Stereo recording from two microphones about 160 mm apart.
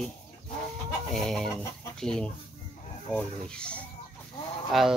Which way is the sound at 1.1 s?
5° left (ahead or behind).